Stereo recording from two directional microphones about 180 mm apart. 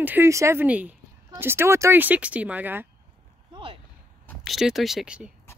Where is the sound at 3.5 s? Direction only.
30° right (ahead or behind).